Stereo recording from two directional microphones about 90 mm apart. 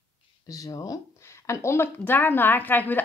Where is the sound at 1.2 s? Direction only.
30° left (ahead or behind).